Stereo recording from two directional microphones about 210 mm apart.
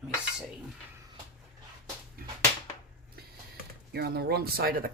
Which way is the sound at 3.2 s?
50° right (ahead or behind).